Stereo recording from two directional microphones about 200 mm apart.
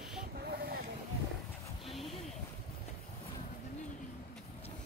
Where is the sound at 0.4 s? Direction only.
50° right (ahead or behind).